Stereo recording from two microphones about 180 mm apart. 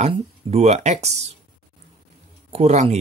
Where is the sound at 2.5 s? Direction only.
40° right (ahead or behind).